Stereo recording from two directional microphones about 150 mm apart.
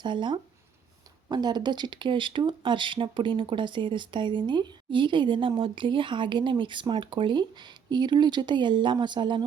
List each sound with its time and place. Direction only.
0.0 s speech: 30° right (ahead or behind)